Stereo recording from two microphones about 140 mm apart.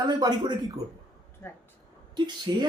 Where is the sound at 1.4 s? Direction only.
15° left (ahead or behind).